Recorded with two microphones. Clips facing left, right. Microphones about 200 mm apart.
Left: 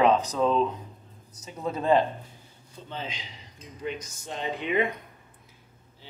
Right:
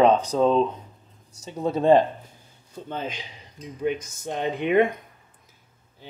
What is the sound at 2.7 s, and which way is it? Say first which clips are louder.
Mantra: right 6 dB; 50° right (ahead or behind).